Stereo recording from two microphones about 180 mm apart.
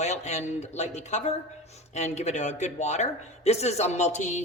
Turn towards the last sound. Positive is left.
turn(degrees=40)  # may be behind; listen again after turning